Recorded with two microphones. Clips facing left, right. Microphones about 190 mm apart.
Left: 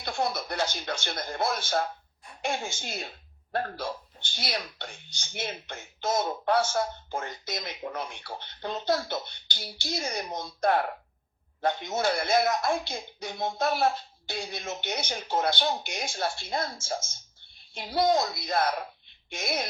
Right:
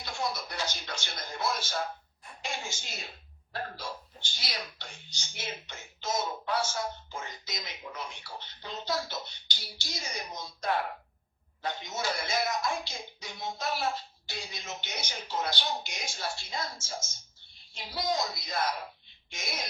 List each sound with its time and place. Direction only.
0.0 s a man's voice: 60° left (ahead or behind)